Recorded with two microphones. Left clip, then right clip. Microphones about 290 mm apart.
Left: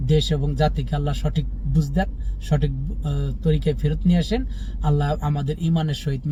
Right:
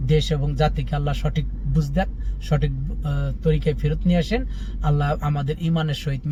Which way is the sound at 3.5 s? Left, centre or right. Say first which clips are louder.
Even; right.